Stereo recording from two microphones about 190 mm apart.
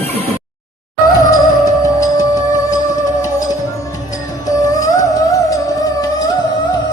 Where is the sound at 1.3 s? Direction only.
20° left (ahead or behind).